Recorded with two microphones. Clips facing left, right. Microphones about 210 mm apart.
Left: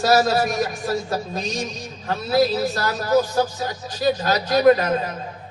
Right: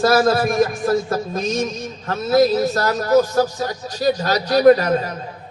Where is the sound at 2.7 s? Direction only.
40° right (ahead or behind).